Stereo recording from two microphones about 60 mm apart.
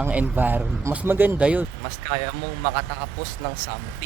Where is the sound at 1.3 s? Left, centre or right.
Right.